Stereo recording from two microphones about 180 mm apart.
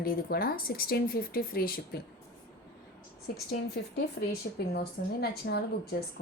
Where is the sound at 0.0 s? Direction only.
55° left (ahead or behind).